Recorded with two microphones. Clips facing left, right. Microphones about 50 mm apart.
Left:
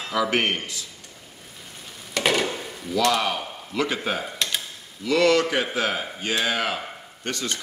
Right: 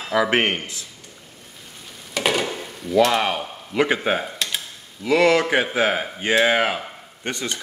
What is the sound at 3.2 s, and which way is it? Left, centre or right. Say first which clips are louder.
A man's voice: right 3 dB; right.